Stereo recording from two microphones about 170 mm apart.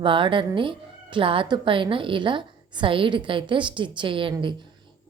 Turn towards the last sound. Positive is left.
turn(degrees=-30)  # may be behind; listen again after turning